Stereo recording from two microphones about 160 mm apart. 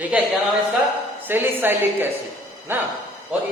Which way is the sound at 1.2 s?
15° right (ahead or behind).